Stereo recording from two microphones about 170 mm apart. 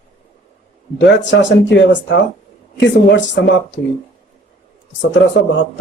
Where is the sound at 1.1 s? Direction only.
90° left.